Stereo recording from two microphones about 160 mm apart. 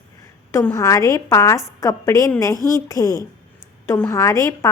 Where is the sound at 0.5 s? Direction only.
20° left (ahead or behind).